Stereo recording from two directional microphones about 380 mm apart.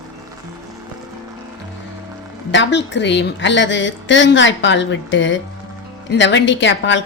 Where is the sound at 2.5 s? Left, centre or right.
Left.